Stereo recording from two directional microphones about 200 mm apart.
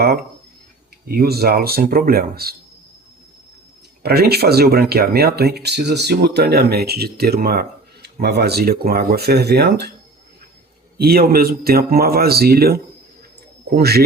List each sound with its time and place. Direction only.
1.0 s speech: 50° right (ahead or behind)
4.0 s speech: 55° right (ahead or behind)
11.0 s speech: 50° right (ahead or behind)